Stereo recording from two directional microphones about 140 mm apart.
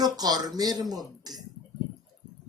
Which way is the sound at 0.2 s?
30° right (ahead or behind).